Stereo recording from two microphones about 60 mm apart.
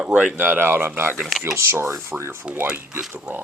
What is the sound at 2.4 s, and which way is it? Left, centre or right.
Speech, right.